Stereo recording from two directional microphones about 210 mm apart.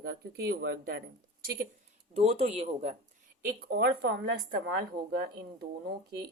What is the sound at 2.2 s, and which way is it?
Speech, 30° right (ahead or behind).